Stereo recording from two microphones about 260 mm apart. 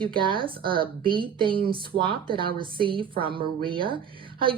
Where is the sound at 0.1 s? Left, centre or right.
Centre.